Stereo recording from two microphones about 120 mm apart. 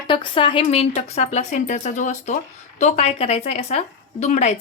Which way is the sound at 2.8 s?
65° left (ahead or behind).